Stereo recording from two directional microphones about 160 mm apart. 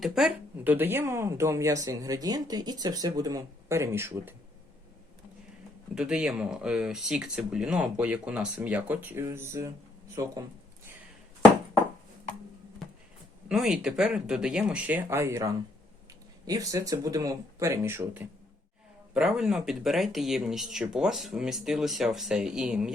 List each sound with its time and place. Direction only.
0.0 s speech: 5° right (ahead or behind)
5.9 s speech: 5° right (ahead or behind); by 10.3 s 20° right (ahead or behind)
13.5 s speech: 5° right (ahead or behind)